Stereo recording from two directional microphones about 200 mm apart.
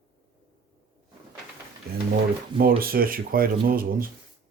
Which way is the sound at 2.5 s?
45° right (ahead or behind).